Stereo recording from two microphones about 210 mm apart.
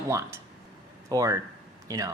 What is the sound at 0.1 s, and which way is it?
Speech, 15° right (ahead or behind).